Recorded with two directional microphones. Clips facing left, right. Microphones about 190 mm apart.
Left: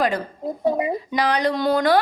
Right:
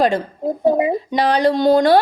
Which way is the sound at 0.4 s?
Centre (ahead or behind).